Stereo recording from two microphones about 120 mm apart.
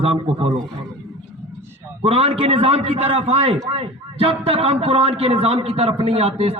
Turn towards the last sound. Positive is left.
turn(degrees=-55)  # may be behind; listen again after turning